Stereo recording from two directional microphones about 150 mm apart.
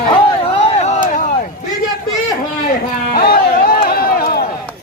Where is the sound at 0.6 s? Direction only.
40° left (ahead or behind).